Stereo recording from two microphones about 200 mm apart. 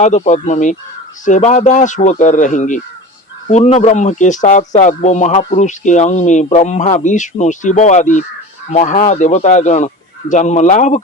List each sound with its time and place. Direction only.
0.0 s speech: 35° left (ahead or behind)